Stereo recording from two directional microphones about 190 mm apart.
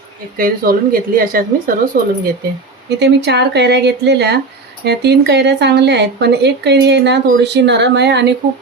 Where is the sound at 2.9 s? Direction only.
60° right (ahead or behind).